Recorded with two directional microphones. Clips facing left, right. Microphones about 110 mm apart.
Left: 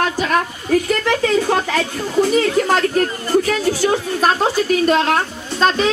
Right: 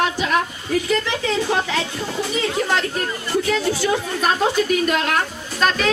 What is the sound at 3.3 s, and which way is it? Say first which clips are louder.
A woman's voice: left 2 dB; 40° left (ahead or behind).